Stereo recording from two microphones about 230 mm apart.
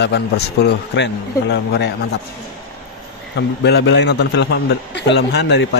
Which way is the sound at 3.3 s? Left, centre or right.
Left.